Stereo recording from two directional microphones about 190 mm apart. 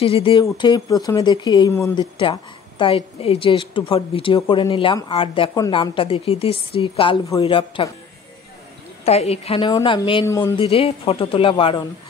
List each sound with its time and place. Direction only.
0.0 s a woman's voice: 30° left (ahead or behind)
2.8 s a woman's voice: 30° left (ahead or behind)
9.0 s a woman's voice: 35° left (ahead or behind)